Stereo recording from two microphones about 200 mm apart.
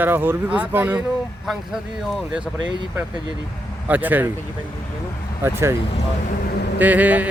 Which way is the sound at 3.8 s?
10° right (ahead or behind).